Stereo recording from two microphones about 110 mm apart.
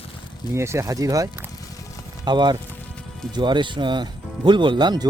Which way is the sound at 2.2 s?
40° right (ahead or behind).